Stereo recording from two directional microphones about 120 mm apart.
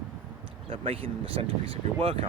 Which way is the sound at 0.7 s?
50° right (ahead or behind).